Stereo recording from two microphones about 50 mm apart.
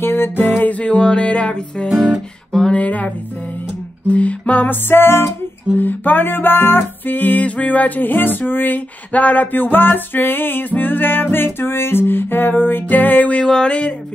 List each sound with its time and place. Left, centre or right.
0.0 s music: left
4.1 s music: left
4.8 s music: left
5.8 s music: left
13.5 s a sound: centre